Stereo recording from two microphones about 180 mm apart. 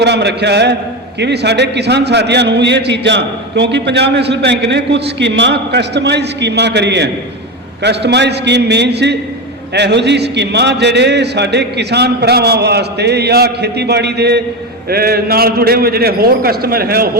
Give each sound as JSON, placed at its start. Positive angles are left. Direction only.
{"t": 0.0, "sound": "a man's voice", "side_deg": -70}